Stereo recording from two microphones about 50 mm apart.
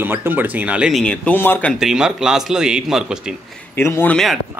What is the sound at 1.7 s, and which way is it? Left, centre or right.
A man's voice, centre.